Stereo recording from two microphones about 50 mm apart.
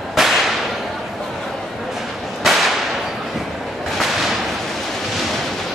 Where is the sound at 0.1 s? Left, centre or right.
Centre.